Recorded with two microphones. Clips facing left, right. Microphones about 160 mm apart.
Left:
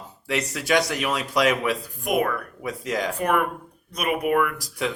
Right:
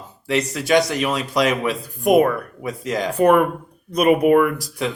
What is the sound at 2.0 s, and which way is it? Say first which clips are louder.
Speech: right 8 dB; 30° right (ahead or behind).